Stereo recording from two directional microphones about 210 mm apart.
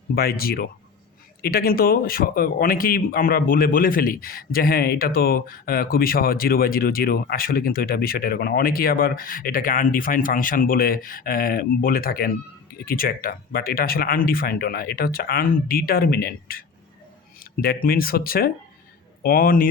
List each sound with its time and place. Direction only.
0.1 s speech: 45° left (ahead or behind)